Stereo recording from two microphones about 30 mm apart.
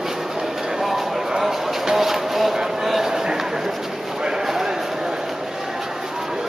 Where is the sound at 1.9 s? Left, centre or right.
Centre.